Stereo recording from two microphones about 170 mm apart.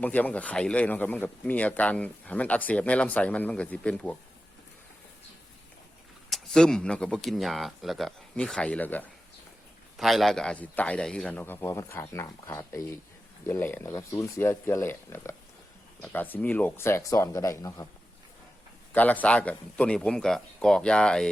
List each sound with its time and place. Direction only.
0.0 s speech: 10° left (ahead or behind)
6.3 s speech: 5° left (ahead or behind)
10.0 s speech: centre (ahead or behind); by 17.8 s 20° left (ahead or behind)
18.9 s speech: 10° left (ahead or behind)